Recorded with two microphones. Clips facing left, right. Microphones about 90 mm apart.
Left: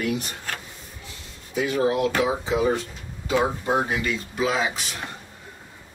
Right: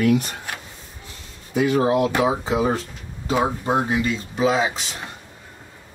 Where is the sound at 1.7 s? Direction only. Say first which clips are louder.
Right 2 dB; 40° right (ahead or behind).